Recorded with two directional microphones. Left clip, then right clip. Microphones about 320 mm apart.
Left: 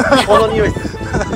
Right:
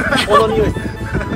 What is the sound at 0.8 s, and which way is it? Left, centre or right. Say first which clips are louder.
Music: left 3 dB; centre.